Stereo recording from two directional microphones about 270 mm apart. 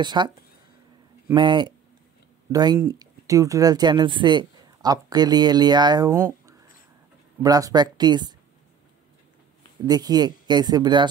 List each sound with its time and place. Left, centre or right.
0.0 s speech: centre
1.3 s speech: centre
9.8 s speech: centre